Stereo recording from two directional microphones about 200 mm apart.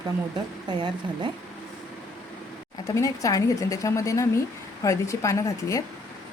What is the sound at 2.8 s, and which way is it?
Speech, 15° left (ahead or behind).